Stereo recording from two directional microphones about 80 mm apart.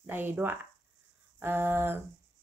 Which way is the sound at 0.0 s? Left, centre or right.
Right.